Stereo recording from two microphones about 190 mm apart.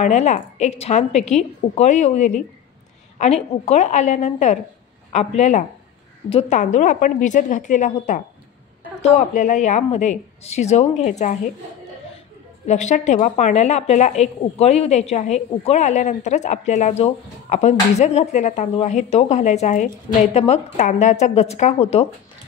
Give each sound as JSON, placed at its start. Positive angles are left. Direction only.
{"t": 0.0, "sound": "a woman's voice", "side_deg": 40}
{"t": 12.6, "sound": "a woman's voice", "side_deg": 40}